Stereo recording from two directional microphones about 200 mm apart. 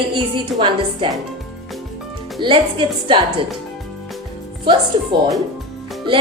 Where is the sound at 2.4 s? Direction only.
25° right (ahead or behind).